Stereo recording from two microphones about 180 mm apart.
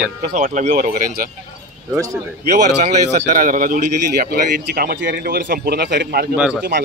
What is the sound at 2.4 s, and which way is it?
Speech, 45° right (ahead or behind).